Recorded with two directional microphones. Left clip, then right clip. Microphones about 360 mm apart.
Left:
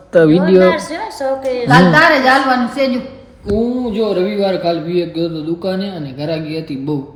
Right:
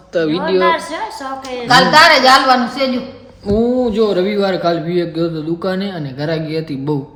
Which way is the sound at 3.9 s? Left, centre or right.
Centre.